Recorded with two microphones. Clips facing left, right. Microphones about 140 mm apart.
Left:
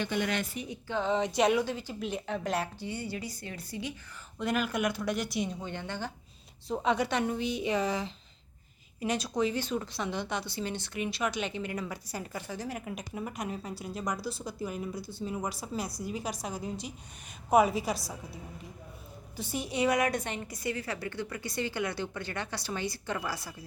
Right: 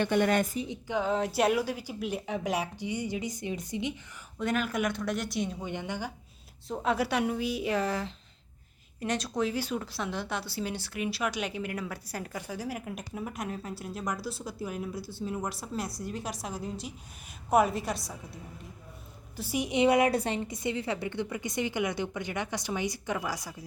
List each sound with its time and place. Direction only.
0.0 s speech: 50° right (ahead or behind)
0.6 s speech: 20° right (ahead or behind)
0.9 s a woman's voice: 5° right (ahead or behind)
4.4 s speech: centre (ahead or behind)
5.6 s a woman's voice: 15° right (ahead or behind)
6.7 s speech: centre (ahead or behind)
19.4 s a woman's voice: 10° right (ahead or behind)